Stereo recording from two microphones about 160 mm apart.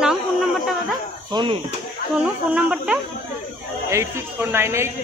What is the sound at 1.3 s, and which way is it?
Speech, 30° right (ahead or behind).